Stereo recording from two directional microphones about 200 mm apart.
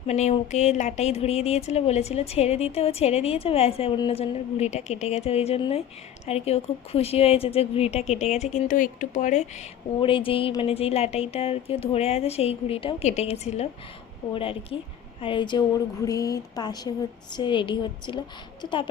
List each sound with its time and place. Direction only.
0.1 s speech: 35° left (ahead or behind)
10.0 s speech: 25° left (ahead or behind)